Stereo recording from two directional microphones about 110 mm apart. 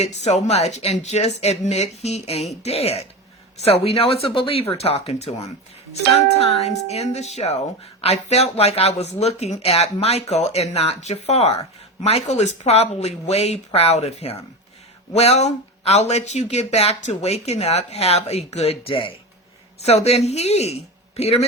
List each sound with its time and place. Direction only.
0.0 s speech: 80° left
6.3 s speech: 70° left (ahead or behind)
19.8 s speech: 75° left (ahead or behind)